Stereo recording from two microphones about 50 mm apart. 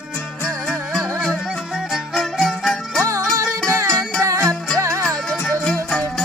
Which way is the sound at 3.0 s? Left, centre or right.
Right.